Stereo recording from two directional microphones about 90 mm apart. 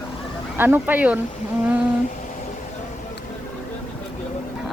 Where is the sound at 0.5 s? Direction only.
25° right (ahead or behind).